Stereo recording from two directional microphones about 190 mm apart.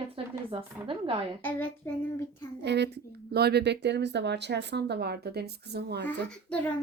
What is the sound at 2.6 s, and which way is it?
Speech, 65° right (ahead or behind).